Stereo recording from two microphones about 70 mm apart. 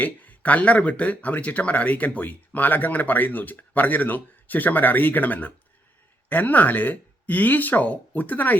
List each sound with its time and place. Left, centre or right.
0.0 s speech: left